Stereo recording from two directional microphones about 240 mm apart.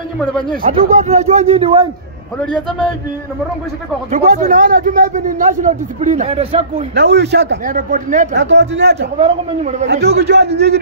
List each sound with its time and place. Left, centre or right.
0.2 s speech: centre
0.6 s a man's voice: right
2.4 s speech: centre
4.1 s speech: right
7.0 s speech: right
8.4 s speech: right
9.2 s a man's voice: right
10.0 s speech: right